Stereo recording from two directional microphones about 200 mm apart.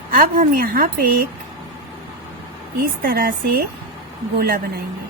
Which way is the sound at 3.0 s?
50° right (ahead or behind).